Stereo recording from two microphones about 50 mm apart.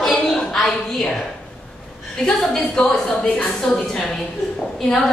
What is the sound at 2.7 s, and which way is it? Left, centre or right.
A woman's voice, centre.